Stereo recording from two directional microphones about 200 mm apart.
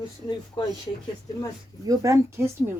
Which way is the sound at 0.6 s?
25° left (ahead or behind).